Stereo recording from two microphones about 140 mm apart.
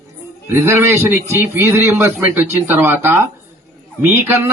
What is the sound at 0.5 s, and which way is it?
A man's voice, 15° right (ahead or behind).